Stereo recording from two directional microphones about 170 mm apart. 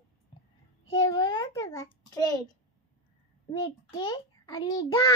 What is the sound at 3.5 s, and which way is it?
A child's voice, 25° left (ahead or behind).